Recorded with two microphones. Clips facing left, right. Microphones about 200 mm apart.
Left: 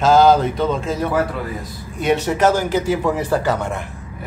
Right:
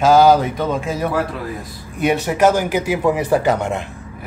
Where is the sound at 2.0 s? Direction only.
10° right (ahead or behind).